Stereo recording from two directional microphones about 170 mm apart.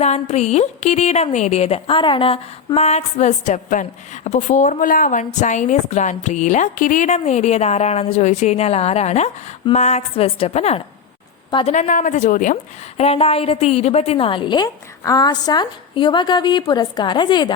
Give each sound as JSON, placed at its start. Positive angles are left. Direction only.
{"t": 0.0, "sound": "a woman's voice", "side_deg": 40}
{"t": 13.0, "sound": "a woman's voice", "side_deg": 35}